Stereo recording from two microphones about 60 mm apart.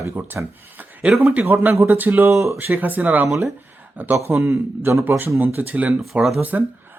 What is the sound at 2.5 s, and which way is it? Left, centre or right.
Speech, right.